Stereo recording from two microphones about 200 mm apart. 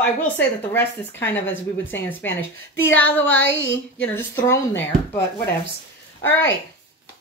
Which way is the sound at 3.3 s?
70° left (ahead or behind).